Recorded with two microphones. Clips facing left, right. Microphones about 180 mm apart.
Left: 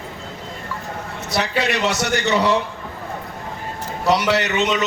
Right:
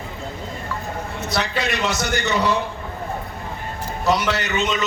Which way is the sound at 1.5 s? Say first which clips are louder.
Left 3 dB; 70° left (ahead or behind).